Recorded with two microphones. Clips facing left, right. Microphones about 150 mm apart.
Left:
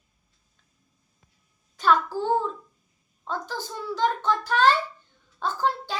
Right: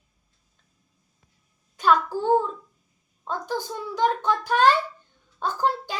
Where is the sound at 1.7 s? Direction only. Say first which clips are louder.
Right 1 dB; 10° right (ahead or behind).